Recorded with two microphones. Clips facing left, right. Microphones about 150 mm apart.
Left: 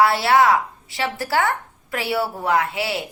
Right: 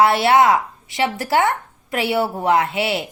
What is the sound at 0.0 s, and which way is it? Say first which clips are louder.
A woman's voice: right 2 dB; 20° right (ahead or behind).